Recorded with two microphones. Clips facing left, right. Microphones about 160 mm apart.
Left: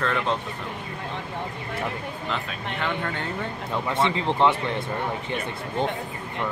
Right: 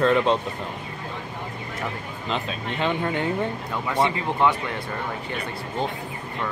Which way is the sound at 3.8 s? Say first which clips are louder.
Right 1 dB; 25° left (ahead or behind).